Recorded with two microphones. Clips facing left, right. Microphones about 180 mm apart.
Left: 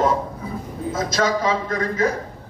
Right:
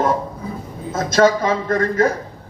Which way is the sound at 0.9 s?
50° right (ahead or behind).